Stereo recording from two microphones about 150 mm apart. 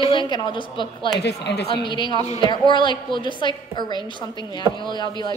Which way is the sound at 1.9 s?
30° left (ahead or behind).